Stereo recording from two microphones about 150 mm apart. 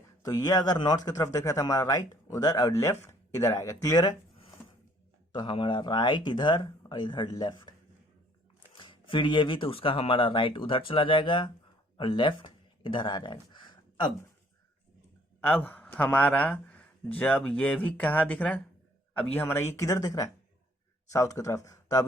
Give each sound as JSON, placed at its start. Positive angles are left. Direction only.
{"t": 0.2, "sound": "speech", "side_deg": 25}
{"t": 5.3, "sound": "speech", "side_deg": 30}
{"t": 8.7, "sound": "speech", "side_deg": 35}
{"t": 15.4, "sound": "a man's voice", "side_deg": 10}